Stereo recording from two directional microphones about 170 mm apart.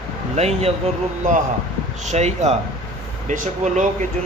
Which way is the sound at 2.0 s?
40° right (ahead or behind).